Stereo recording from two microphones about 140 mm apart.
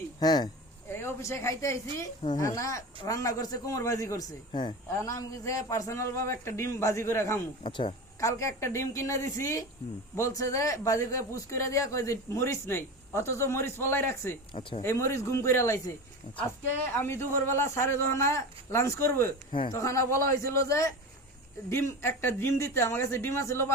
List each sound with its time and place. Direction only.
0.2 s speech: 30° left (ahead or behind)
0.9 s speech: 15° left (ahead or behind)
7.6 s speech: 35° left (ahead or behind)
8.2 s speech: 20° left (ahead or behind)
14.5 s speech: 35° left (ahead or behind)
14.8 s speech: 20° left (ahead or behind)
16.9 s a man's voice: 15° left (ahead or behind)